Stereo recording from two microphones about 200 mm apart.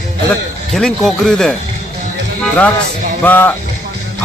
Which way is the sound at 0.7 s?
Centre (ahead or behind).